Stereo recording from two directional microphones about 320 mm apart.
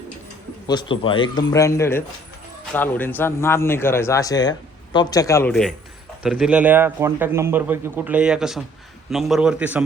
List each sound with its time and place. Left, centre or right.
0.7 s a man's voice: centre